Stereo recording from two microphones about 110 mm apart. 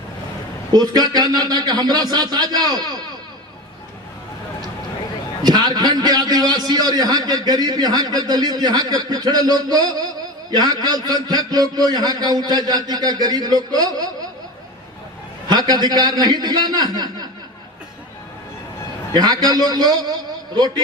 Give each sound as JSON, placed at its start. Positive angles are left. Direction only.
{"t": 0.7, "sound": "a man's voice", "side_deg": -40}
{"t": 5.4, "sound": "a man's voice", "side_deg": -40}
{"t": 15.4, "sound": "a man's voice", "side_deg": -40}
{"t": 19.1, "sound": "a man's voice", "side_deg": -40}